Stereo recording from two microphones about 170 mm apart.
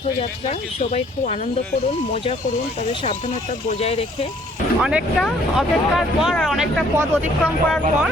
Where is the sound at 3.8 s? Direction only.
35° left (ahead or behind).